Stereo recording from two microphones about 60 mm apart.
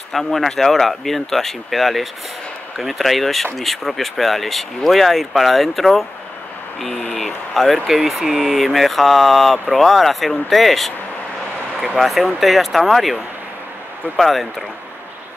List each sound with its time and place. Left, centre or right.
0.1 s speech: centre
12.0 s speech: centre